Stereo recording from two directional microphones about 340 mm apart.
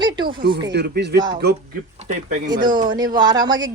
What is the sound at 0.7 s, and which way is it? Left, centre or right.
Speech, right.